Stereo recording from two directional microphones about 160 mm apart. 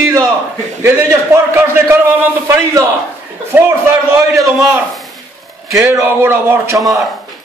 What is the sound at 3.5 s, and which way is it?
A man's voice, 15° right (ahead or behind).